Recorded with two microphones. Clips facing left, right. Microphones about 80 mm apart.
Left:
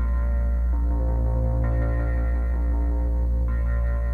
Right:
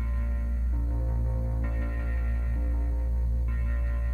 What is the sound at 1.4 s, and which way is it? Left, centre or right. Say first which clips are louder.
Music: left 8 dB; left.